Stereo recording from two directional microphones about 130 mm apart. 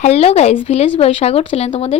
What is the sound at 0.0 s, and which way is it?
Speech, 55° left (ahead or behind).